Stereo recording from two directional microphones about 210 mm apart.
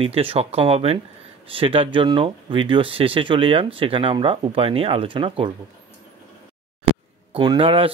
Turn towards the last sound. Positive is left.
turn(degrees=-25)  # may be behind; listen again after turning